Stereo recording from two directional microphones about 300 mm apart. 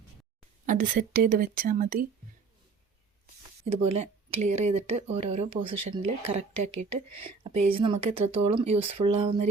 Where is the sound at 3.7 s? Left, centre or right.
Centre.